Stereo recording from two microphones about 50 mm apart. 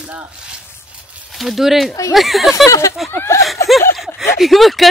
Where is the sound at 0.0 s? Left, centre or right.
Right.